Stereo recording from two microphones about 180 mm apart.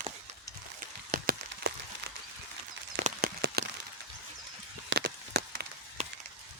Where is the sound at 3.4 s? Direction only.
70° right (ahead or behind).